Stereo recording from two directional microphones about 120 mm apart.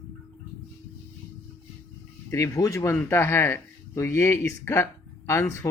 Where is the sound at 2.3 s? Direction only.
25° left (ahead or behind).